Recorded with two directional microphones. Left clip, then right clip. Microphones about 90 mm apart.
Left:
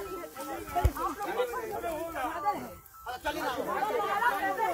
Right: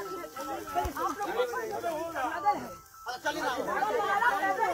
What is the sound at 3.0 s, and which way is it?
Speech, 20° right (ahead or behind).